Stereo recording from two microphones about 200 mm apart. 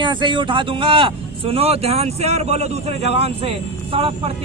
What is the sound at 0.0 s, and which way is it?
A man's voice, 25° right (ahead or behind).